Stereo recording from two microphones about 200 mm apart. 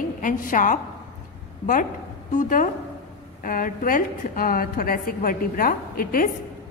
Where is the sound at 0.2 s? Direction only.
40° left (ahead or behind).